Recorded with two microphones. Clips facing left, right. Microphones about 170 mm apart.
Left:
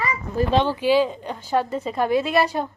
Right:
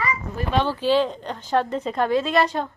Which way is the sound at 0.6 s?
15° left (ahead or behind).